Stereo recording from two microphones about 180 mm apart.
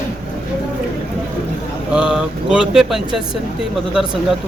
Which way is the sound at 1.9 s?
5° right (ahead or behind).